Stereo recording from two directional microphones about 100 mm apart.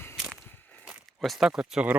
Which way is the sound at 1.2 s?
5° right (ahead or behind).